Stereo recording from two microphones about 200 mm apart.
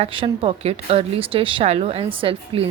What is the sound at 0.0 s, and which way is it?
Speech, 25° right (ahead or behind).